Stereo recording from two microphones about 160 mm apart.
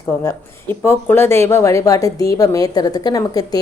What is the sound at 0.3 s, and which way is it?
A woman's voice, 15° left (ahead or behind).